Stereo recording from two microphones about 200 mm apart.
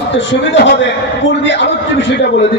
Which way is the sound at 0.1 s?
65° left (ahead or behind).